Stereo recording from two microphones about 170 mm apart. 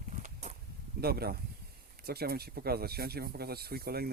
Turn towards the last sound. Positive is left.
turn(degrees=-65)  # may be behind; listen again after turning